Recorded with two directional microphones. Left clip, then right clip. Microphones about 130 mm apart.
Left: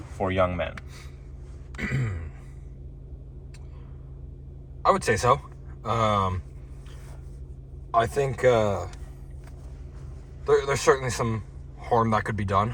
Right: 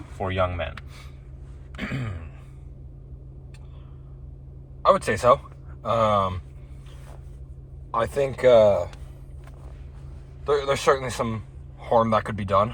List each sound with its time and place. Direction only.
0.2 s speech: 35° left (ahead or behind)
1.7 s speech: 15° right (ahead or behind)
4.9 s speech: 15° right (ahead or behind)
7.9 s speech: 15° right (ahead or behind)
10.4 s a man's voice: 15° right (ahead or behind)